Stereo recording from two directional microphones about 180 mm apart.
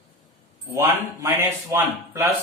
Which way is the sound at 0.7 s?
15° right (ahead or behind).